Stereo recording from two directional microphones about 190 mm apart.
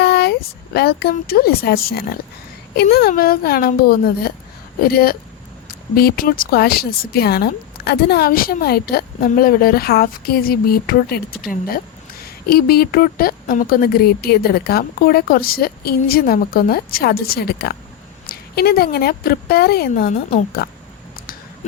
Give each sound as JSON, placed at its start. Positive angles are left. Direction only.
{"t": 0.0, "sound": "a woman's voice", "side_deg": 60}